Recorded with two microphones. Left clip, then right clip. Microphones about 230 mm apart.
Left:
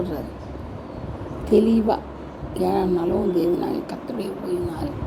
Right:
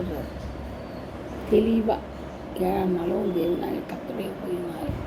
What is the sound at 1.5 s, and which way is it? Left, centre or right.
Speech, left.